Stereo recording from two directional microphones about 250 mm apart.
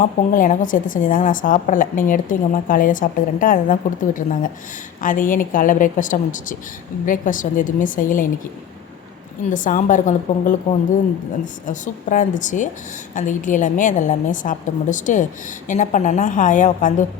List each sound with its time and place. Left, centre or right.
0.0 s a woman's voice: left
9.5 s a woman's voice: left
11.7 s a woman's voice: left